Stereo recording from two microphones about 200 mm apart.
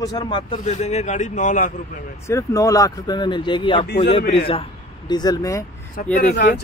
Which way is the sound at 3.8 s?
55° left (ahead or behind).